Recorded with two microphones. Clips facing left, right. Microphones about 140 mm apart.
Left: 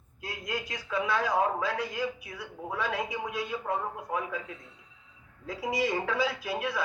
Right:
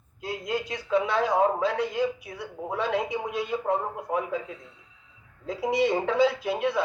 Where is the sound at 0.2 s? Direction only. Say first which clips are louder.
Right 6 dB; 25° right (ahead or behind).